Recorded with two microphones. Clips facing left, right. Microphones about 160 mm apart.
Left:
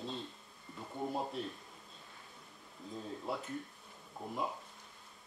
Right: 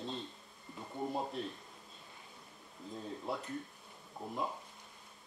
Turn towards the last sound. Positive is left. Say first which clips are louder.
# even
turn(degrees=0)  # may be behind; listen again after turning